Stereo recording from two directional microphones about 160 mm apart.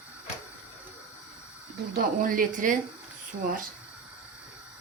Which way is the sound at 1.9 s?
60° right (ahead or behind).